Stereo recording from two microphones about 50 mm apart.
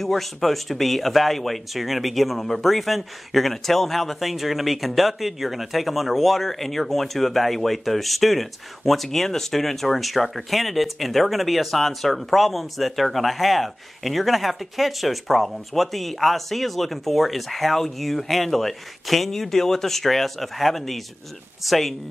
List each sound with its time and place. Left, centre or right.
0.0 s speech: centre